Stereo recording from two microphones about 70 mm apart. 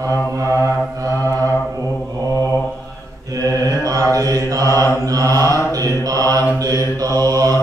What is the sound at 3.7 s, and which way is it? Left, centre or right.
Mantra, right.